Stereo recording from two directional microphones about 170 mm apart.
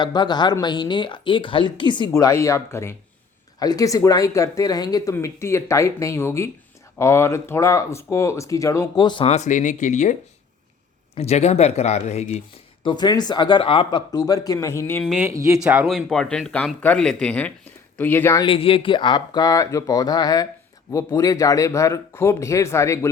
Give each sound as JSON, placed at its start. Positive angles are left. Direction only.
{"t": 0.0, "sound": "a woman's voice", "side_deg": 25}
{"t": 9.2, "sound": "speech", "side_deg": 40}
{"t": 12.8, "sound": "a woman's voice", "side_deg": 25}
{"t": 15.2, "sound": "speech", "side_deg": -15}
{"t": 15.5, "sound": "speech", "side_deg": -5}
{"t": 18.4, "sound": "a woman's voice", "side_deg": 30}